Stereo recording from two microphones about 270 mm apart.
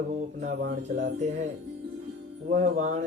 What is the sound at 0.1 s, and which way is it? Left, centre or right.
Speech, right.